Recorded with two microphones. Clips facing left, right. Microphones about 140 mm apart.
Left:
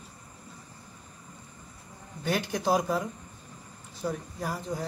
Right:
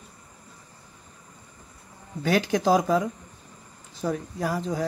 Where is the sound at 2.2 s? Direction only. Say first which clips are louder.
Right 7 dB; 90° right.